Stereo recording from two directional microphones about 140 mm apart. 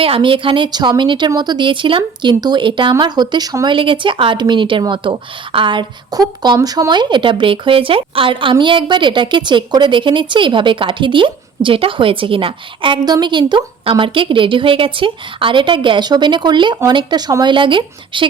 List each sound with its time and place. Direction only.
0.0 s speech: 40° right (ahead or behind)